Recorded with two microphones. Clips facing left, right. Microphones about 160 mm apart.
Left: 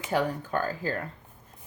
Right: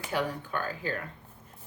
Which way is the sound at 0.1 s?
40° left (ahead or behind).